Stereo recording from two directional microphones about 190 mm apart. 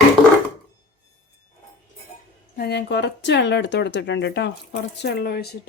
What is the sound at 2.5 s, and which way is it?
Speech, 55° left (ahead or behind).